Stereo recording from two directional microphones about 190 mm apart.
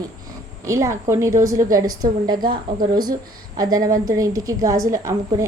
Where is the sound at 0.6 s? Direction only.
15° right (ahead or behind).